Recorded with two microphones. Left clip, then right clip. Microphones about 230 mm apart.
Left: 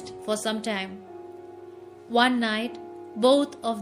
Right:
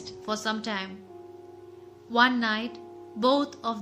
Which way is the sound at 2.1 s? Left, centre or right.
Centre.